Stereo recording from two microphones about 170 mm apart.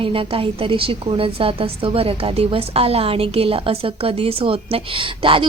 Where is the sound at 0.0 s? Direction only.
30° right (ahead or behind).